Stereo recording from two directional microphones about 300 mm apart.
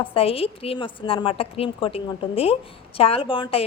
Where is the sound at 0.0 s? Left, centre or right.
Centre.